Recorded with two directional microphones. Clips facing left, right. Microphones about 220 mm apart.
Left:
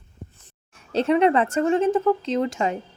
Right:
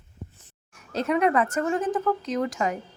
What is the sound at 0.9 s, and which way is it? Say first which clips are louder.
Speech: left 4 dB; 30° left (ahead or behind).